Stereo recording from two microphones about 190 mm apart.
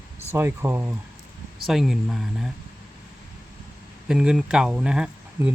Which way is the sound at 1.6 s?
Centre (ahead or behind).